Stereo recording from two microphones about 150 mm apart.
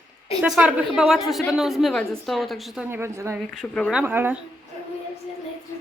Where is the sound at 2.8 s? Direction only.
15° right (ahead or behind).